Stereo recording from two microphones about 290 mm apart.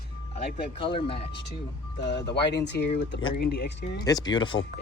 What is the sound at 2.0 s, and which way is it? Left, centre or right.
Speech, left.